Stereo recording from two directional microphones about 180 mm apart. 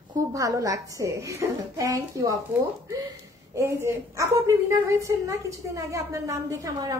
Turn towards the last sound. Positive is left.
turn(degrees=-20)  # may be behind; listen again after turning